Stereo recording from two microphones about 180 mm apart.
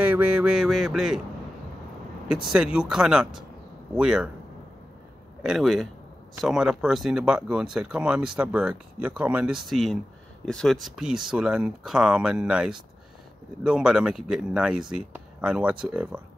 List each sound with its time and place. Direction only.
0.0 s music: 10° right (ahead or behind)
2.2 s speech: 5° right (ahead or behind)
5.4 s speech: centre (ahead or behind)